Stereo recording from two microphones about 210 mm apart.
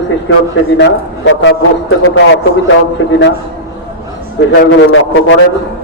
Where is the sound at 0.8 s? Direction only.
55° left (ahead or behind).